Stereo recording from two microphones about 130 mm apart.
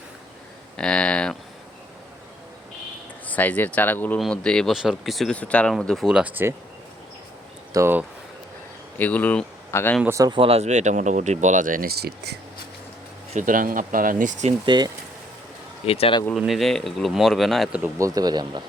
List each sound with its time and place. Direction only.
0.8 s speech: 10° left (ahead or behind)
3.2 s speech: 10° left (ahead or behind); by 6.5 s 15° right (ahead or behind)
7.7 s speech: 20° right (ahead or behind)
9.0 s speech: 10° left (ahead or behind)
10.0 s speech: 20° right (ahead or behind)
10.2 s speech: 40° right (ahead or behind)
10.7 s speech: 65° right (ahead or behind); by 11.9 s 90° right
13.3 s speech: 90° right; by 14.5 s 70° right (ahead or behind)
14.6 s speech: 35° right (ahead or behind)
15.9 s speech: 45° left (ahead or behind)
16.5 s speech: centre (ahead or behind)
17.9 s speech: 25° right (ahead or behind)